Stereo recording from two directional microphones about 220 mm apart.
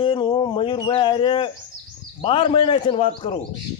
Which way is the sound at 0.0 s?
20° left (ahead or behind).